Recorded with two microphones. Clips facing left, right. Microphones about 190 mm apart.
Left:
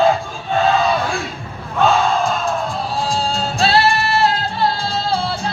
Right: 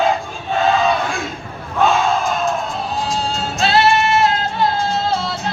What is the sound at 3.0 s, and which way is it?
Music, 35° left (ahead or behind).